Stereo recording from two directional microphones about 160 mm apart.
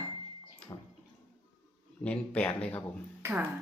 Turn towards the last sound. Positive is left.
turn(degrees=-15)  # may be behind; listen again after turning